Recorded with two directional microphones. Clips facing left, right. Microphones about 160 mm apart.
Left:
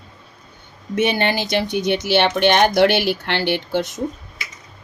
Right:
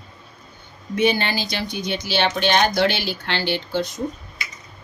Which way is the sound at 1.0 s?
65° left (ahead or behind).